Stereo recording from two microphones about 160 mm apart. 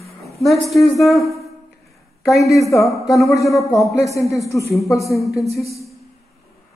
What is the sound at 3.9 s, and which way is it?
Speech, 20° left (ahead or behind).